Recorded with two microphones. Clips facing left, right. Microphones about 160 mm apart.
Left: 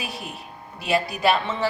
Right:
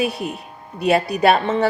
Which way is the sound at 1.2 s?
55° right (ahead or behind).